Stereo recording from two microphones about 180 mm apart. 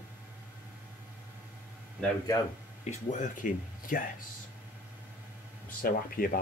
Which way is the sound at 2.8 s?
45° left (ahead or behind).